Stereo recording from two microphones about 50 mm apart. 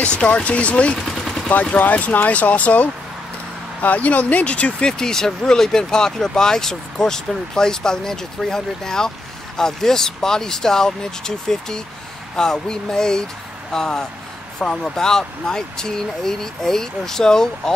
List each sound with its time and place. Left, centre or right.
0.2 s speech: left
0.9 s gunshot: centre
1.5 s speech: left; by 17.7 s centre